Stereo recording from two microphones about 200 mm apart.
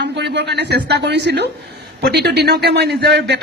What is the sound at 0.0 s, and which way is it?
Speech, 60° right (ahead or behind).